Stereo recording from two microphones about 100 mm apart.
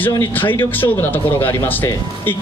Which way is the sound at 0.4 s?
20° left (ahead or behind).